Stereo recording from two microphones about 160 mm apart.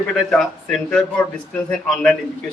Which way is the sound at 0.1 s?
5° left (ahead or behind).